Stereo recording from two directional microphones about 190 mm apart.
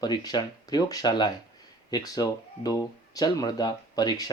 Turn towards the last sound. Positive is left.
turn(degrees=20)  # may be behind; listen again after turning